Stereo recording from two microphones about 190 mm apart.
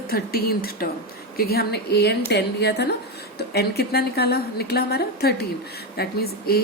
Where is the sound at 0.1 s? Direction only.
50° left (ahead or behind).